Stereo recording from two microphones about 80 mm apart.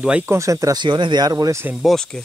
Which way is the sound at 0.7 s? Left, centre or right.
Right.